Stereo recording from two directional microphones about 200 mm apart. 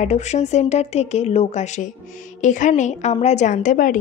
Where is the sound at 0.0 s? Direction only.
35° left (ahead or behind).